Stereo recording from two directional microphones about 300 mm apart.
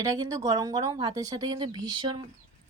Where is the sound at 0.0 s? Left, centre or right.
Centre.